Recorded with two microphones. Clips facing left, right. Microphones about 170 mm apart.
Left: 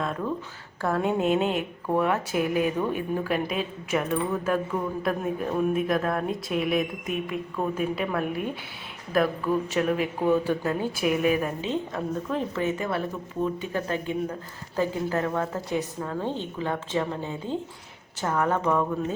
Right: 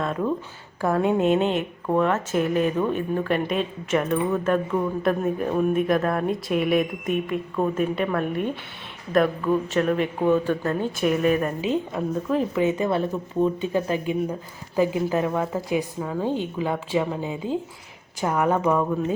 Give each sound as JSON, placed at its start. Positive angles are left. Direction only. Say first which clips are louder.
{"t": 0.0, "sound": "a woman's voice", "louder": "right 4 dB", "side_deg": 0}
{"t": 11.6, "sound": "a woman's voice", "louder": "right 4 dB", "side_deg": -10}
{"t": 12.5, "sound": "a woman's voice", "louder": "right 5 dB", "side_deg": -20}